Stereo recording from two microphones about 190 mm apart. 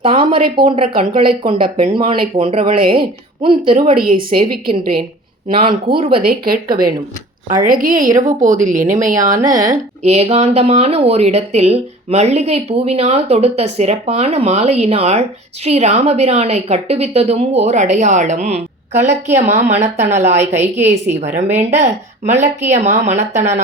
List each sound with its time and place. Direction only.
0.0 s speech: 25° right (ahead or behind)
3.9 s a woman's voice: 50° right (ahead or behind)
5.5 s speech: 30° right (ahead or behind)
6.1 s a woman's voice: 50° right (ahead or behind)